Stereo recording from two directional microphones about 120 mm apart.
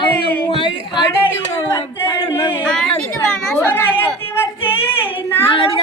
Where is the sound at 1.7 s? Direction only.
20° left (ahead or behind).